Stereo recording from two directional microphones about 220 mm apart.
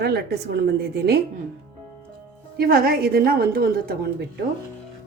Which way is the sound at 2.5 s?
45° right (ahead or behind).